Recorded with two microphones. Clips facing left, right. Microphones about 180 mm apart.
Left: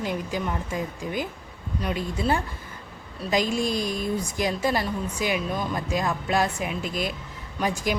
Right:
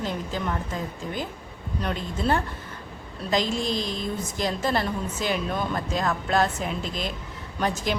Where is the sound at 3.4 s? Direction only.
45° left (ahead or behind).